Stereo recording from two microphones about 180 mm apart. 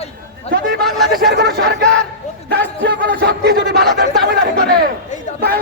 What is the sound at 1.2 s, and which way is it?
A man's voice, 65° right (ahead or behind).